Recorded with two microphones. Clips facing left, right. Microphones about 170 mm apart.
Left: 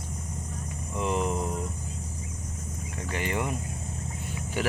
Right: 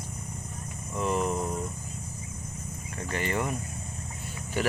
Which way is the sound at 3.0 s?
15° left (ahead or behind).